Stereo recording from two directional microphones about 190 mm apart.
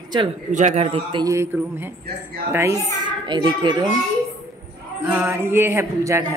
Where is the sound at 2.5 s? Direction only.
15° right (ahead or behind).